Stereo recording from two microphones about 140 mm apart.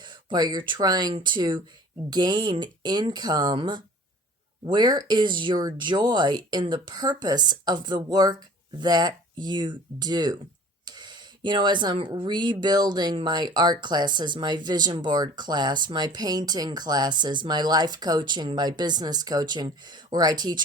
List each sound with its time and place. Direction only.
0.0 s speech: 35° right (ahead or behind)